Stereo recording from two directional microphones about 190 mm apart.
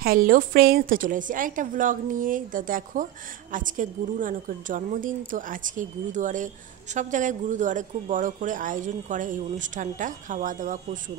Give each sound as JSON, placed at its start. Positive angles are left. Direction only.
{"t": 0.0, "sound": "a woman's voice", "side_deg": -50}